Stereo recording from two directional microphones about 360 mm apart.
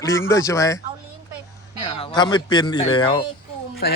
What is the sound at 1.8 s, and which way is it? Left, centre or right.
A man's voice, centre.